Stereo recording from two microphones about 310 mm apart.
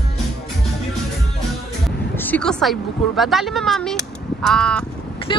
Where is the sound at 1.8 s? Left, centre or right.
Centre.